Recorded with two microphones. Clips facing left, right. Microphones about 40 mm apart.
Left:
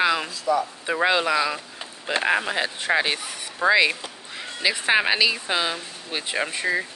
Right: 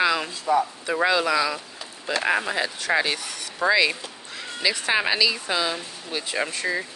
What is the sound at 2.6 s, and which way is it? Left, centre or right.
Speech, left.